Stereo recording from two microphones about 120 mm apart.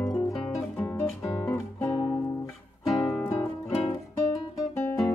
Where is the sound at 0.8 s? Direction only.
20° left (ahead or behind).